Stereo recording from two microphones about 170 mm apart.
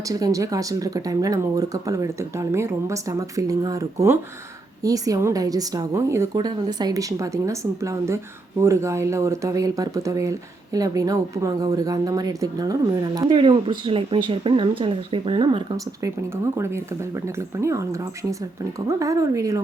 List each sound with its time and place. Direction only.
0.1 s speech: 20° right (ahead or behind)